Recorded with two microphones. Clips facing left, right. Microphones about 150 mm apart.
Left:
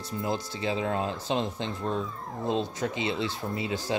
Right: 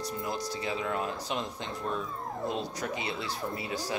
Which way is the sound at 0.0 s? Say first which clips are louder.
Left 3 dB; 25° left (ahead or behind).